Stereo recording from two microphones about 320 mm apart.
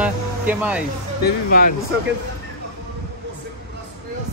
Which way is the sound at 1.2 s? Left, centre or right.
Left.